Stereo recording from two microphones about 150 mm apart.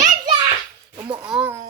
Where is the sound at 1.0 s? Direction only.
30° right (ahead or behind).